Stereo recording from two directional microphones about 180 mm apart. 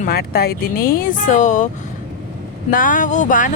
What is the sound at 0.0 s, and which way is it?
Speech, 60° left (ahead or behind).